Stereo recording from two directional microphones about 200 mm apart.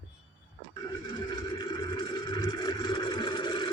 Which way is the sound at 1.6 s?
20° left (ahead or behind).